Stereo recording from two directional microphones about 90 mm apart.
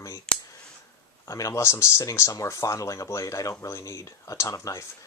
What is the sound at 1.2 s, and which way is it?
Speech, 35° left (ahead or behind).